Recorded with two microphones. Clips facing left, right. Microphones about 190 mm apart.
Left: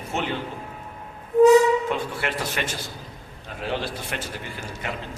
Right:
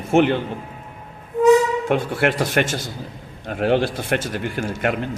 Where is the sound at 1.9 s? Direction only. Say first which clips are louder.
Right 8 dB; 60° right (ahead or behind).